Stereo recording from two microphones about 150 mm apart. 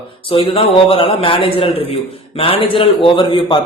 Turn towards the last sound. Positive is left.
turn(degrees=30)  # may be behind; listen again after turning